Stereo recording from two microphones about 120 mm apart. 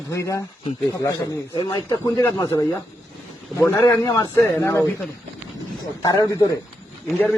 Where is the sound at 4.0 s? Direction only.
30° left (ahead or behind).